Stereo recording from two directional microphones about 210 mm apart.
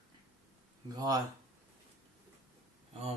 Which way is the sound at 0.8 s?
20° right (ahead or behind).